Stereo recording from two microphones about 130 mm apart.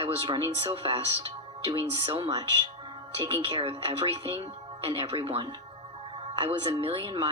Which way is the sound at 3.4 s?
45° right (ahead or behind).